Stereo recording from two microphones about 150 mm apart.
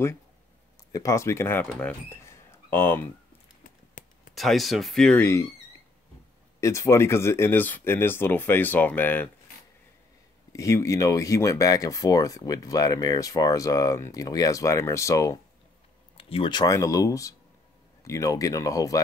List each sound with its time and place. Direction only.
0.9 s speech: 20° left (ahead or behind)
4.0 s a sound: 60° left (ahead or behind)
4.4 s speech: centre (ahead or behind)
5.2 s speech: 20° left (ahead or behind)
6.6 s speech: 20° left (ahead or behind)
10.5 s speech: 20° left (ahead or behind)
16.2 s speech: 40° left (ahead or behind); by 18.9 s 20° left (ahead or behind)